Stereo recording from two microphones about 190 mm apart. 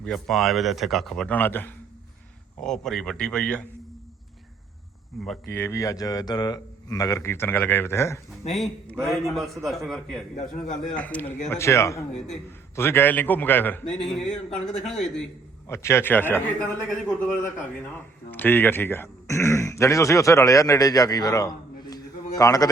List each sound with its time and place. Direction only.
0.0 s a man's voice: centre (ahead or behind)
5.2 s a man's voice: centre (ahead or behind)
5.5 s speech: 15° left (ahead or behind)
8.5 s a man's voice: centre (ahead or behind)
15.6 s speech: 15° left (ahead or behind)
18.3 s speech: 10° left (ahead or behind)